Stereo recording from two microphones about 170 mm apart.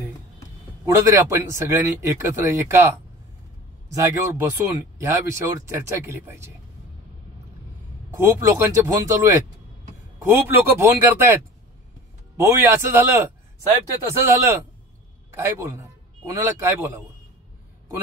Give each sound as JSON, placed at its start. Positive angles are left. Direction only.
{"t": 0.8, "sound": "speech", "side_deg": -20}
{"t": 8.1, "sound": "a man's voice", "side_deg": -15}